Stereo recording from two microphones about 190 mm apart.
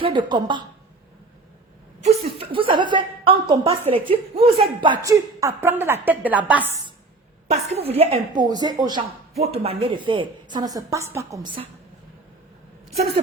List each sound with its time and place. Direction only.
0.0 s a woman's voice: 25° right (ahead or behind)
2.0 s a woman's voice: 35° right (ahead or behind); by 6.7 s 10° right (ahead or behind)
7.5 s a woman's voice: 35° right (ahead or behind)
9.4 s a woman's voice: 30° right (ahead or behind); by 11.3 s 15° right (ahead or behind)